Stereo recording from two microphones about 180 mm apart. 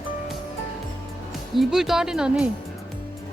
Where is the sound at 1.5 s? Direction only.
Centre (ahead or behind).